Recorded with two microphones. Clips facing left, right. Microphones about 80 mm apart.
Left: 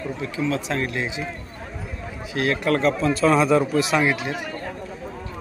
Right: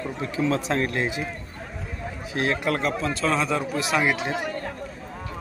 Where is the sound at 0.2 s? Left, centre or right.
Right.